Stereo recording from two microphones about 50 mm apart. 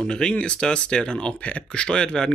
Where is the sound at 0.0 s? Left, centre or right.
Centre.